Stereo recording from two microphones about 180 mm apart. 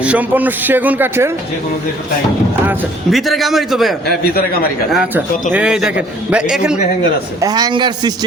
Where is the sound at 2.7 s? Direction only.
5° right (ahead or behind).